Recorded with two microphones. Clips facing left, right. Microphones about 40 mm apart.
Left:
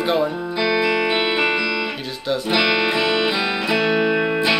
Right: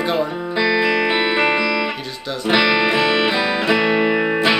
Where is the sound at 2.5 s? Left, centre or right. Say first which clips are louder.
Right 4 dB; right.